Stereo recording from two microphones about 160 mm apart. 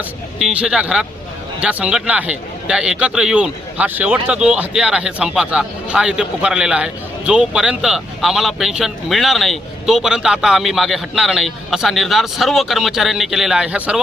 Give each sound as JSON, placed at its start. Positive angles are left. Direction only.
{"t": 0.3, "sound": "a man's voice", "side_deg": -5}